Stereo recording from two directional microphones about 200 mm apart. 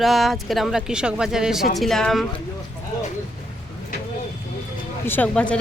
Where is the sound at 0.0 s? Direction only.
Centre (ahead or behind).